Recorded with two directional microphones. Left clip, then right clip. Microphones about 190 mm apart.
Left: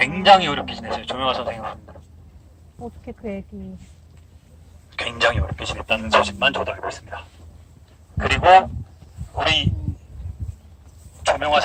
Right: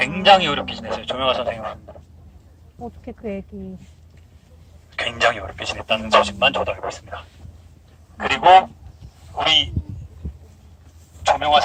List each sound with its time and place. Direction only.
0.2 s speech: 10° right (ahead or behind)
3.0 s speech: 45° right (ahead or behind)
4.9 s speech: 10° right (ahead or behind)
11.2 s speech: centre (ahead or behind)